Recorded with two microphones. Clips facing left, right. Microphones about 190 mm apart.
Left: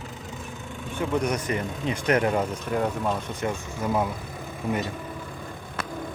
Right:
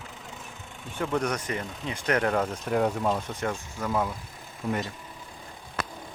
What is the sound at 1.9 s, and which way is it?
Speech, 15° left (ahead or behind).